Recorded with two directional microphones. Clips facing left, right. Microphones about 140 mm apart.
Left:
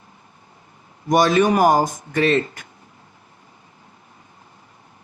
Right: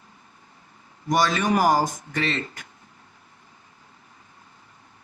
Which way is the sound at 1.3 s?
25° left (ahead or behind).